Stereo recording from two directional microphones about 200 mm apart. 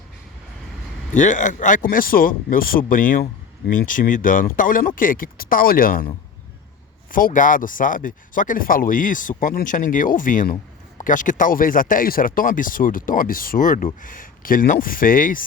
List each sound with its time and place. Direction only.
1.1 s speech: 40° left (ahead or behind)
7.1 s speech: 45° left (ahead or behind)